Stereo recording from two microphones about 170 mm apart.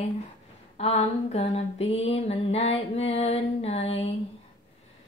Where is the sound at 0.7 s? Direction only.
35° left (ahead or behind).